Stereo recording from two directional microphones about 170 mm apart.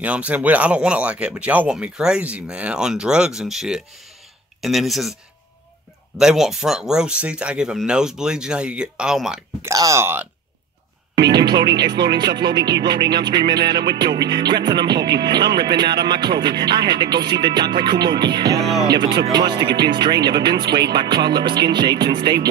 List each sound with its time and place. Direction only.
0.0 s speech: 10° right (ahead or behind)
6.1 s speech: 5° right (ahead or behind)
9.7 s speech: 20° right (ahead or behind)
11.3 s speech: 25° right (ahead or behind)